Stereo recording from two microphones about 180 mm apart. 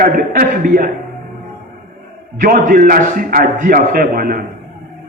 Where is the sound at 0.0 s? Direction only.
55° right (ahead or behind).